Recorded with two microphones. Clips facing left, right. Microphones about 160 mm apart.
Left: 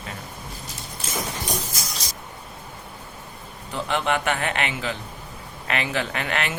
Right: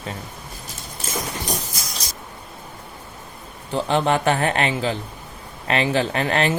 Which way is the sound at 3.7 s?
35° right (ahead or behind).